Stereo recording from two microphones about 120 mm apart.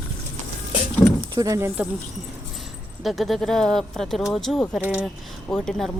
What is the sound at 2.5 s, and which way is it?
Speech, centre (ahead or behind).